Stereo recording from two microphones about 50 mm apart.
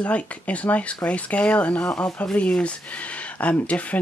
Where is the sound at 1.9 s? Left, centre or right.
Centre.